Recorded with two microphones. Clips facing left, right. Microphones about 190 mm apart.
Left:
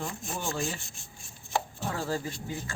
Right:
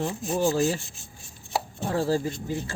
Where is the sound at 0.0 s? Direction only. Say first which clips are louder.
Right 10 dB; 35° right (ahead or behind).